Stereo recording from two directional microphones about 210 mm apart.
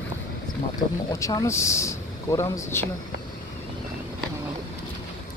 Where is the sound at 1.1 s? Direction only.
15° left (ahead or behind).